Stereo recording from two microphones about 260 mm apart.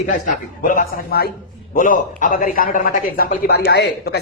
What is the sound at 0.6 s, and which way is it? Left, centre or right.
Speech, left.